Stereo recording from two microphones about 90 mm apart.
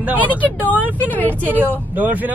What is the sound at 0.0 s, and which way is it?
Speech, 20° right (ahead or behind).